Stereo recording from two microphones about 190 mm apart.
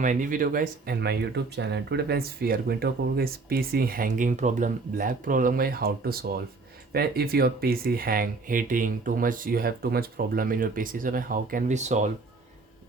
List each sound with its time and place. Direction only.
0.0 s speech: 45° right (ahead or behind)